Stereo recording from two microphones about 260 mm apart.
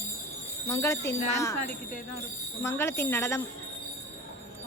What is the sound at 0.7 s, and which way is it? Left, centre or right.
Speech, centre.